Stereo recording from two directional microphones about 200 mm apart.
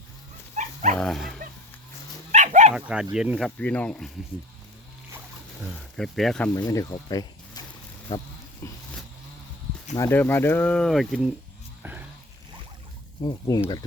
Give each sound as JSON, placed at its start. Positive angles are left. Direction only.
{"t": 0.5, "sound": "dog", "side_deg": -35}
{"t": 0.9, "sound": "speech", "side_deg": 0}
{"t": 2.3, "sound": "dog", "side_deg": -35}
{"t": 2.7, "sound": "speech", "side_deg": -5}
{"t": 6.0, "sound": "speech", "side_deg": 0}
{"t": 6.5, "sound": "speech", "side_deg": 15}
{"t": 8.6, "sound": "vehicle", "side_deg": 15}
{"t": 9.9, "sound": "speech", "side_deg": 15}
{"t": 11.8, "sound": "a sound", "side_deg": -10}
{"t": 13.2, "sound": "speech", "side_deg": 20}